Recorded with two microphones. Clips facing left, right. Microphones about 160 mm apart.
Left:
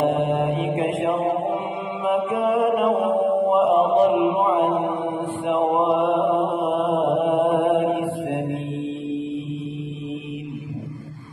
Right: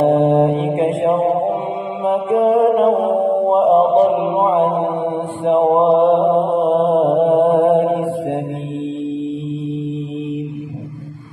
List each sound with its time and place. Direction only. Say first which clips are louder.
0.0 s mantra: right 8 dB; 30° right (ahead or behind)